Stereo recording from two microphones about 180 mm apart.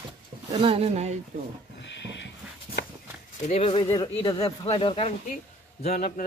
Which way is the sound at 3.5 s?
35° left (ahead or behind).